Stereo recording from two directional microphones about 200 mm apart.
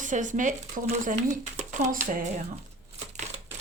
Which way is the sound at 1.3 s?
40° right (ahead or behind).